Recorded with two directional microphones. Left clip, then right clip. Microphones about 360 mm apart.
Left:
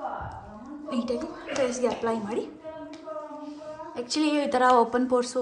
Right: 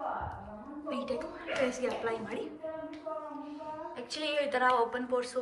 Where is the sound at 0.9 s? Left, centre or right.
Centre.